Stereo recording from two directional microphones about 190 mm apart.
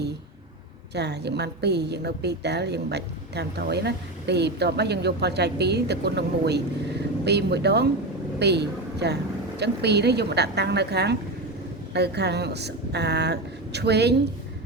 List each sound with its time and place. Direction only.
0.9 s a woman's voice: 60° right (ahead or behind)